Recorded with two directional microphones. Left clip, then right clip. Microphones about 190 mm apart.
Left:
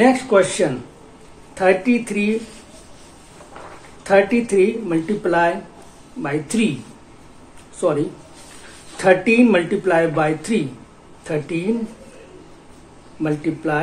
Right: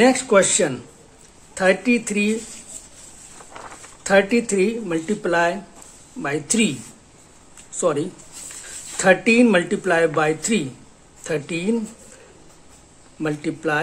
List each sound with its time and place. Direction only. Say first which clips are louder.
0.0 s speech: left 1 dB; 25° right (ahead or behind)
4.0 s speech: left 2 dB; 20° right (ahead or behind)
8.9 s speech: left 1 dB; 20° right (ahead or behind)
13.2 s speech: left 2 dB; 25° right (ahead or behind)